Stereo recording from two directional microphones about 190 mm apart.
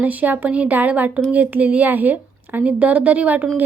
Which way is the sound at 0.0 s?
10° right (ahead or behind).